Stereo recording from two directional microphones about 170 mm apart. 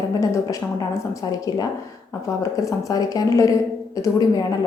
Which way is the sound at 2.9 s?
20° left (ahead or behind).